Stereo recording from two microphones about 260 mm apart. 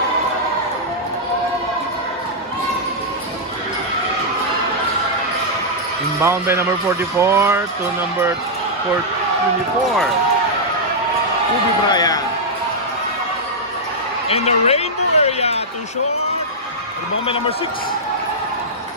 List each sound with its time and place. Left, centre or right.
6.2 s speech: centre
11.9 s music: centre
14.3 s a sound: left